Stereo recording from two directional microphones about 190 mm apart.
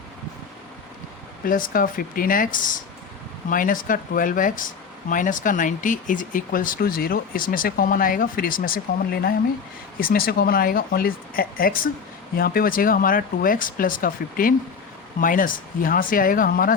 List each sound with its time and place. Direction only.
1.5 s speech: 45° left (ahead or behind)